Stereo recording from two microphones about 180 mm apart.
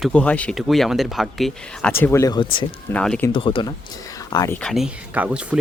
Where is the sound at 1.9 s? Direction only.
15° left (ahead or behind).